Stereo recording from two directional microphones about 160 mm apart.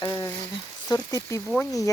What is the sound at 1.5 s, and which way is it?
Speech, 5° left (ahead or behind).